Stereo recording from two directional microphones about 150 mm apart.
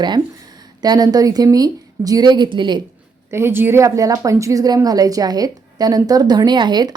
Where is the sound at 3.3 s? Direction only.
15° right (ahead or behind).